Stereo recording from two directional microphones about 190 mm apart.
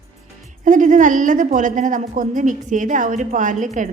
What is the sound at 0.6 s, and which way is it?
A woman's voice, 40° right (ahead or behind).